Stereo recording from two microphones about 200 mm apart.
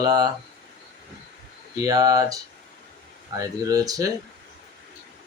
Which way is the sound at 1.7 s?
20° right (ahead or behind).